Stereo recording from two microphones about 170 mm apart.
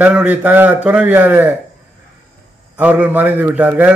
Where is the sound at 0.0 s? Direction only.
5° right (ahead or behind).